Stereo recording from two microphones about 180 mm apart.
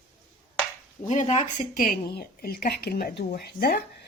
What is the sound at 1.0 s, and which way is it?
A woman's voice, 40° left (ahead or behind).